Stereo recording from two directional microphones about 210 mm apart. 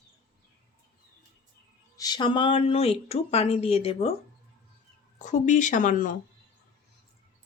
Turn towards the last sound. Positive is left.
turn(degrees=40)  # may be behind; listen again after turning